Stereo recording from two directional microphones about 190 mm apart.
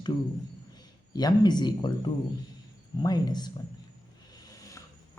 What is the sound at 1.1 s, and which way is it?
Speech, 20° left (ahead or behind).